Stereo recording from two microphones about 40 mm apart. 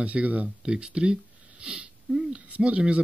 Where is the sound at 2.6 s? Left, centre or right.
Right.